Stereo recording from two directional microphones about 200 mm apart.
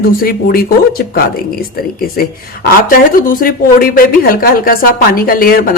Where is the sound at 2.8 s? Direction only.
45° left (ahead or behind).